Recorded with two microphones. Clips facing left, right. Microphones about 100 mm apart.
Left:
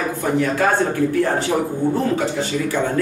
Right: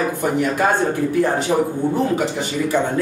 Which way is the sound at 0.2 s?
20° right (ahead or behind).